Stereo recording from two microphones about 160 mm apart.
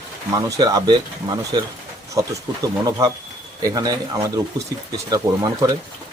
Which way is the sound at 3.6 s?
25° right (ahead or behind).